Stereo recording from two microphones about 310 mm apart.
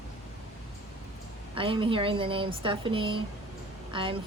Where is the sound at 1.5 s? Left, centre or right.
Centre.